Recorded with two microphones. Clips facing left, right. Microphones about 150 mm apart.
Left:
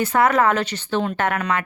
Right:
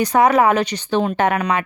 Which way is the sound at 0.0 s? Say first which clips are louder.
Right 3 dB; 15° right (ahead or behind).